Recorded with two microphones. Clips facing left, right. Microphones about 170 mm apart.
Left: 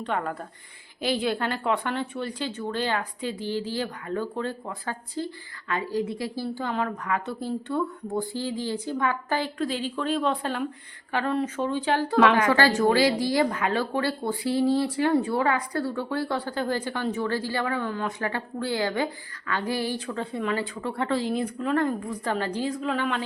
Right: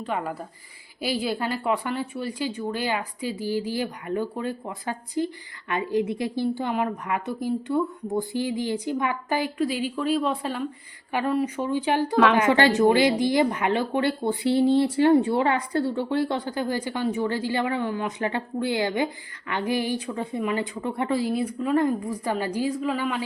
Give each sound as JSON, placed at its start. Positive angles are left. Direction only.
{"t": 0.0, "sound": "speech", "side_deg": -5}
{"t": 12.1, "sound": "speech", "side_deg": 0}
{"t": 12.4, "sound": "speech", "side_deg": -20}